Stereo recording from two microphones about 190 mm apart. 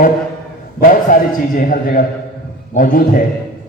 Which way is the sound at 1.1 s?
45° left (ahead or behind).